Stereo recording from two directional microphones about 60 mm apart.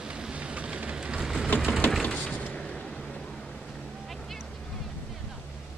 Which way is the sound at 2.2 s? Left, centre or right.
Centre.